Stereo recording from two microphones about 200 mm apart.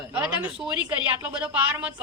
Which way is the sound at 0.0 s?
10° right (ahead or behind).